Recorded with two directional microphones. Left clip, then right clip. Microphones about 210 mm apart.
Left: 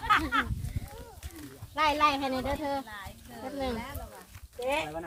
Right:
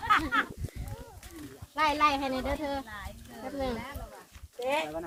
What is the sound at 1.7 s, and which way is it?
Speech, 45° left (ahead or behind).